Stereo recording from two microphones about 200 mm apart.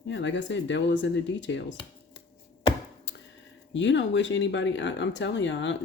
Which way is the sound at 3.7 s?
65° left (ahead or behind).